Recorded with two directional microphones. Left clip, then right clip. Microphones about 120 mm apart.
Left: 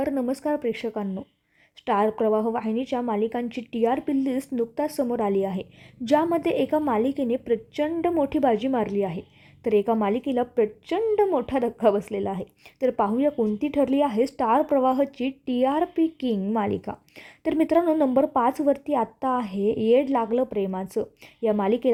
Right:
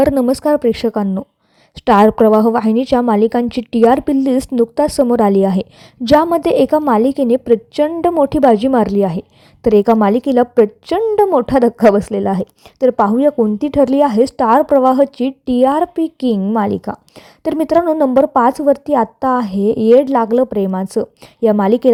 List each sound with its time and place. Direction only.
0.0 s a woman's voice: 50° right (ahead or behind)